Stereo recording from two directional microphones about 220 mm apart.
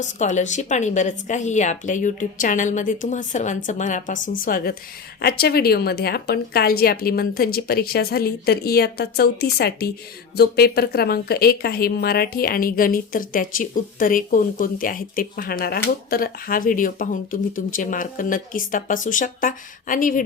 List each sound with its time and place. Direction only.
0.0 s a woman's voice: 35° left (ahead or behind)